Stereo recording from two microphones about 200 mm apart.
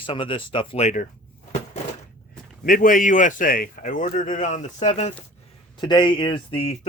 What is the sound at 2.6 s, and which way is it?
Speech, 45° left (ahead or behind).